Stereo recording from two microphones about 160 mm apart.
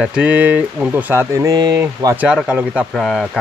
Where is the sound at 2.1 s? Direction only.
5° right (ahead or behind).